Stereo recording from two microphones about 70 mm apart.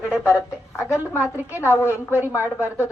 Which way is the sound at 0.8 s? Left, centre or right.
Left.